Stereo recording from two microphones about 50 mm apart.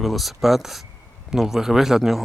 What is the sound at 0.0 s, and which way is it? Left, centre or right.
Speech, centre.